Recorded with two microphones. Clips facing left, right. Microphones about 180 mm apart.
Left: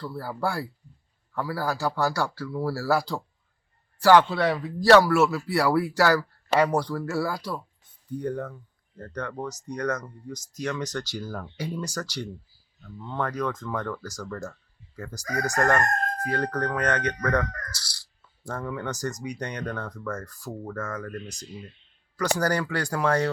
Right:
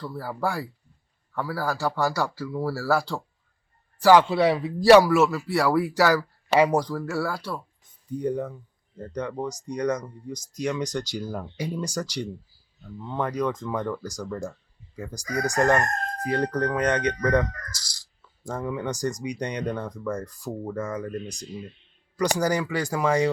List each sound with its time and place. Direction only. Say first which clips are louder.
0.0 s speech: right 1 dB; 5° left (ahead or behind)
5.1 s speech: right 1 dB; centre (ahead or behind)
7.3 s speech: even; 5° right (ahead or behind)
15.5 s speech: right 2 dB; 15° right (ahead or behind)